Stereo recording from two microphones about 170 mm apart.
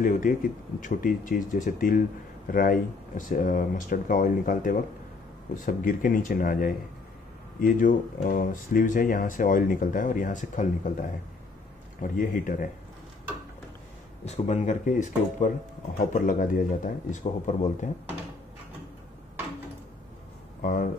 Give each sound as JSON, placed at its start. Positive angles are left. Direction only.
{"t": 0.0, "sound": "speech", "side_deg": 55}
{"t": 12.0, "sound": "speech", "side_deg": 55}
{"t": 14.2, "sound": "speech", "side_deg": 40}
{"t": 20.6, "sound": "a sound", "side_deg": 55}